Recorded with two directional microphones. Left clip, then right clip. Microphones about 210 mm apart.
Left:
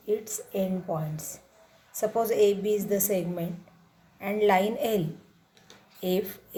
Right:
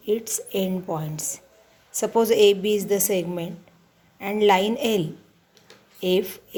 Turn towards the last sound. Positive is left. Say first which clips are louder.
# right 6 dB
turn(degrees=-30)  # may be behind; listen again after turning